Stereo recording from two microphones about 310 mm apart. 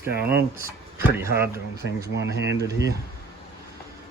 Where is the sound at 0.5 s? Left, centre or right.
Centre.